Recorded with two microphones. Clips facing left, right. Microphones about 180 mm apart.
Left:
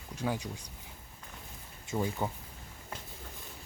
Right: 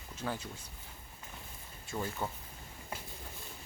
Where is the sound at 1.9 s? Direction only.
15° left (ahead or behind).